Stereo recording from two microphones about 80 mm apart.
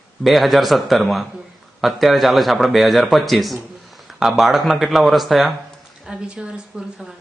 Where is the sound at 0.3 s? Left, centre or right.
Centre.